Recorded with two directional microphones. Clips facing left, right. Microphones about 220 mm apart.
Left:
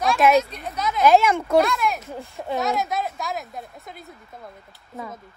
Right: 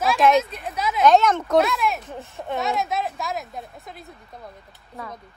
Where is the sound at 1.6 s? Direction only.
Centre (ahead or behind).